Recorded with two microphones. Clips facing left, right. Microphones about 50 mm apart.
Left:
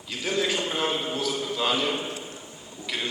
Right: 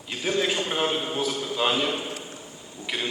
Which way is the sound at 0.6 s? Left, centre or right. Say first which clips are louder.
Right 2 dB; centre.